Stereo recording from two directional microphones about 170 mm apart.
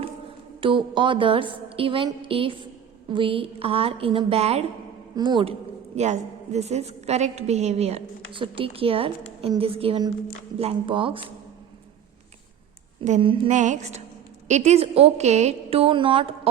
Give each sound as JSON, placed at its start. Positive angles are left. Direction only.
{"t": 0.6, "sound": "a woman's voice", "side_deg": -30}
{"t": 5.1, "sound": "speech", "side_deg": -25}
{"t": 6.0, "sound": "a woman's voice", "side_deg": -40}
{"t": 13.1, "sound": "a woman's voice", "side_deg": -35}
{"t": 13.5, "sound": "music", "side_deg": -45}
{"t": 14.4, "sound": "a woman's voice", "side_deg": -40}